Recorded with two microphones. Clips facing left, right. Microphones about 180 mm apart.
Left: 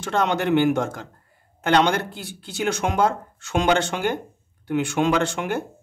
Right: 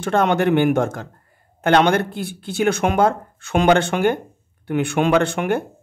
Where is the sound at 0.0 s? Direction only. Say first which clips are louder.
Right 5 dB; 55° right (ahead or behind).